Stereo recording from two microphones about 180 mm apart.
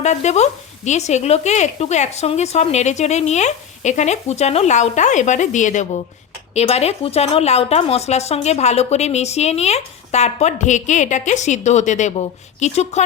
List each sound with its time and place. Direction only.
0.0 s speech: 40° left (ahead or behind)